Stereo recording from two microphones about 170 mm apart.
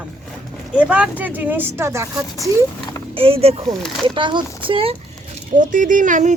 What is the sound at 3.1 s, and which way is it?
Speech, 35° right (ahead or behind).